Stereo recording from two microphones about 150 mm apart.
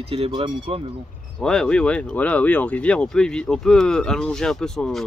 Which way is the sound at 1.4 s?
5° left (ahead or behind).